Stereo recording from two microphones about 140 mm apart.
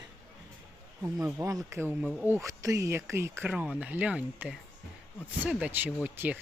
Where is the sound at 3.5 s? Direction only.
5° right (ahead or behind).